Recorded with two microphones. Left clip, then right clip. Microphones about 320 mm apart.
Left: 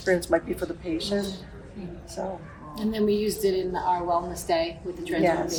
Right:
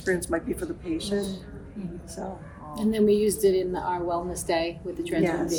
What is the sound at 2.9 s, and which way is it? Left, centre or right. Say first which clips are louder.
A woman's voice: right 3 dB; centre.